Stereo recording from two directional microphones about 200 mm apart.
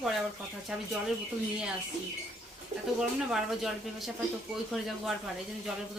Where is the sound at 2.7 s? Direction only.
40° right (ahead or behind).